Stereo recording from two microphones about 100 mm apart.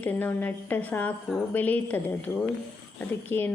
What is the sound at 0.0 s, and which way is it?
A woman's voice, 15° left (ahead or behind).